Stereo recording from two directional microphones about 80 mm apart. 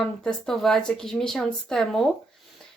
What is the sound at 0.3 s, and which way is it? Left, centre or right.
Speech, centre.